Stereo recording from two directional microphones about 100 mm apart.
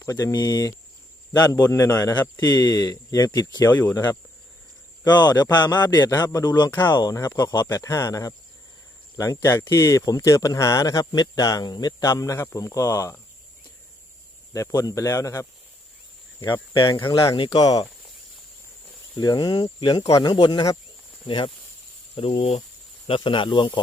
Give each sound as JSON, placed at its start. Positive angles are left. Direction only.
{"t": 0.0, "sound": "a man's voice", "side_deg": 35}
{"t": 14.5, "sound": "speech", "side_deg": 35}
{"t": 16.5, "sound": "a man's voice", "side_deg": 50}
{"t": 17.5, "sound": "speech", "side_deg": 40}
{"t": 19.1, "sound": "a man's voice", "side_deg": 45}
{"t": 20.1, "sound": "speech", "side_deg": 35}
{"t": 20.3, "sound": "a man's voice", "side_deg": 50}
{"t": 22.1, "sound": "speech", "side_deg": 80}
{"t": 23.0, "sound": "speech", "side_deg": 60}